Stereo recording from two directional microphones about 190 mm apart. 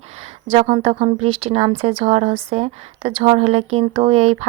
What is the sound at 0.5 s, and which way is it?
Speech, 30° right (ahead or behind).